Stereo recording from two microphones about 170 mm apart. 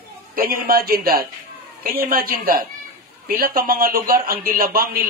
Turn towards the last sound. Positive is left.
turn(degrees=-60)  # may be behind; listen again after turning